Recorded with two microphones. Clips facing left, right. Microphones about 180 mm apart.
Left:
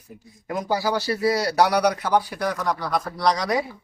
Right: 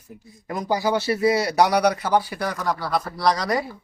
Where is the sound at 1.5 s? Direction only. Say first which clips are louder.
Right 1 dB; 10° right (ahead or behind).